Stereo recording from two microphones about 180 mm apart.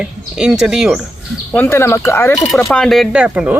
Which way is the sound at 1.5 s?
15° left (ahead or behind).